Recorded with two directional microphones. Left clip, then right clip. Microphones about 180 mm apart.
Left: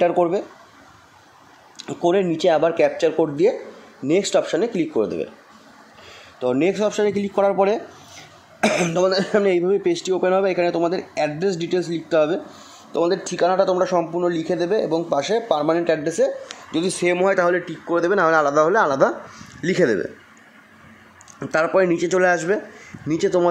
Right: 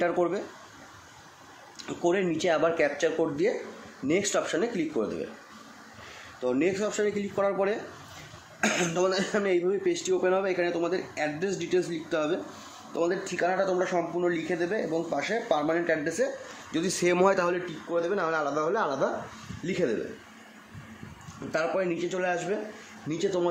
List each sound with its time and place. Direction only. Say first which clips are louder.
0.0 s speech: left 9 dB; 35° left (ahead or behind)
1.8 s speech: left 8 dB; 40° left (ahead or behind)
6.4 s speech: left 8 dB; 50° left (ahead or behind)
16.7 s speech: left 6 dB; 10° left (ahead or behind)
17.8 s speech: left 10 dB; 45° left (ahead or behind)
21.5 s speech: left 10 dB; 45° left (ahead or behind)